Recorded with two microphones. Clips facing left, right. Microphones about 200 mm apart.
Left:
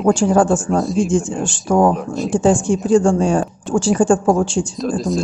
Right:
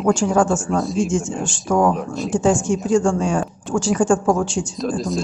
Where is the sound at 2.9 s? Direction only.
35° left (ahead or behind).